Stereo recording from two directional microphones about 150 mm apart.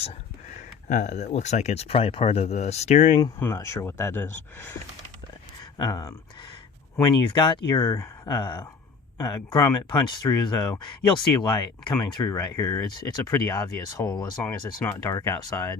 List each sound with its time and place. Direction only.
0.9 s speech: 55° left (ahead or behind)
3.4 s speech: 20° left (ahead or behind)
5.7 s speech: 25° left (ahead or behind)